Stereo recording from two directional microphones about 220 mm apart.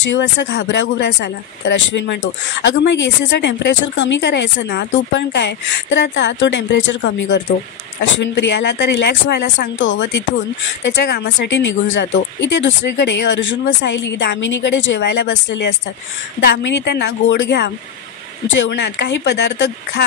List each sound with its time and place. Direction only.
0.0 s speech: 55° left (ahead or behind)